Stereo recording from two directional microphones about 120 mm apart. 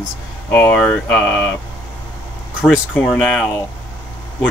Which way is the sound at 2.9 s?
5° left (ahead or behind).